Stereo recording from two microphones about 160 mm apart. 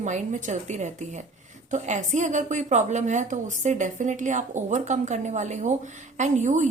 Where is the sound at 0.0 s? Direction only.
50° right (ahead or behind).